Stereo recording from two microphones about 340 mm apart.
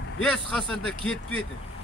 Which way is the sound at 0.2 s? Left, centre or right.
Centre.